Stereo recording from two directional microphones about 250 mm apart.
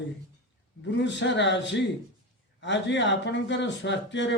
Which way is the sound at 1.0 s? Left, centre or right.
Left.